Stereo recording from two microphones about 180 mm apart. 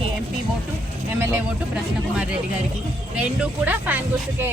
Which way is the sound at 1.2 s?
10° right (ahead or behind).